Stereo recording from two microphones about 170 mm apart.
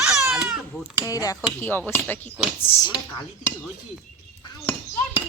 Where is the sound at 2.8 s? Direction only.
25° left (ahead or behind).